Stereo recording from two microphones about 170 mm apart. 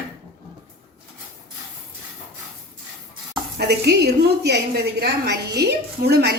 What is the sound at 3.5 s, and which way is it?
A woman's voice, 75° right (ahead or behind).